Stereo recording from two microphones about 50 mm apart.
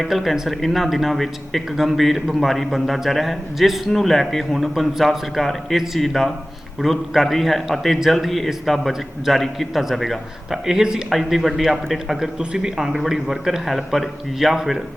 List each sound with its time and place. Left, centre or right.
0.0 s a man's voice: centre